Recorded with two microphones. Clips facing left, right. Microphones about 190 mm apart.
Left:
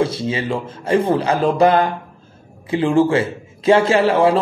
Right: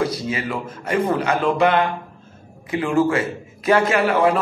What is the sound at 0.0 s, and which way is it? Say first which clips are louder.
A man's voice: left 3 dB; 25° left (ahead or behind).